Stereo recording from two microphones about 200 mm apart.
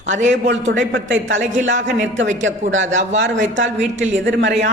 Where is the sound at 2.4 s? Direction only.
70° right (ahead or behind).